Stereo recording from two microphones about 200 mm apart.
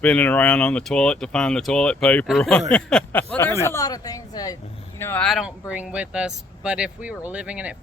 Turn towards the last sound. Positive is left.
turn(degrees=-5)  # may be behind; listen again after turning